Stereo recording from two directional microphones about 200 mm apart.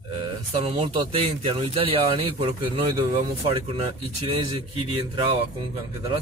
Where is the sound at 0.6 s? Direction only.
30° right (ahead or behind).